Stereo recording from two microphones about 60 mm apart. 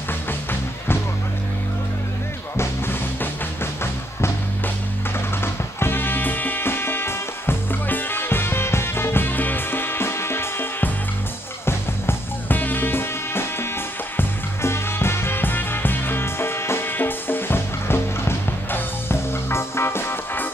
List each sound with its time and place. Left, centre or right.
0.3 s music: left
2.5 s music: left
5.4 s music: left